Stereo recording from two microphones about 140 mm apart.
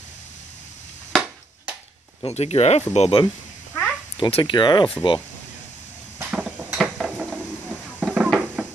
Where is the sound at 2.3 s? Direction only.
50° left (ahead or behind).